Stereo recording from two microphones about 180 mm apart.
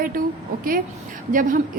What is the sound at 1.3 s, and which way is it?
Speech, 50° right (ahead or behind).